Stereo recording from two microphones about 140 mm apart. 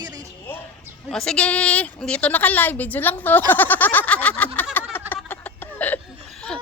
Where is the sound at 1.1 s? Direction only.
5° left (ahead or behind).